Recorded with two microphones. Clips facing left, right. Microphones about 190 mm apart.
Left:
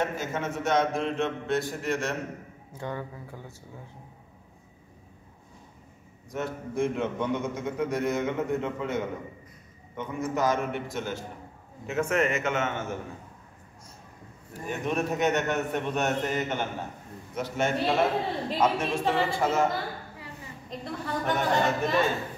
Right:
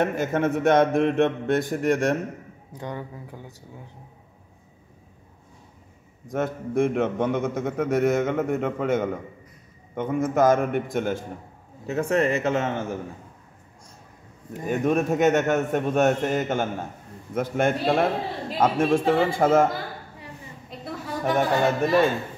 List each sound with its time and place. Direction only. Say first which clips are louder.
0.0 s a man's voice: right 7 dB; 55° right (ahead or behind)
2.7 s speech: right 1 dB; 15° right (ahead or behind)
6.2 s a man's voice: right 6 dB; 50° right (ahead or behind)
11.8 s a man's voice: right 4 dB; 35° right (ahead or behind)
14.7 s a man's voice: right 7 dB; 50° right (ahead or behind)
20.8 s speech: right 3 dB; 5° right (ahead or behind)